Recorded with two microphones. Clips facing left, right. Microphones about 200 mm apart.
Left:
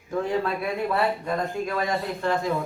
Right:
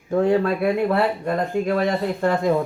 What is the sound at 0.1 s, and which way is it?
Speech, 60° right (ahead or behind).